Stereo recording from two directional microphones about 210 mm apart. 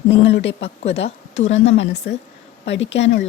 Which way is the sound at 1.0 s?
65° left (ahead or behind).